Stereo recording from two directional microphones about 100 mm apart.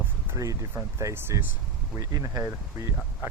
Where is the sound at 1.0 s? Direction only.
25° right (ahead or behind).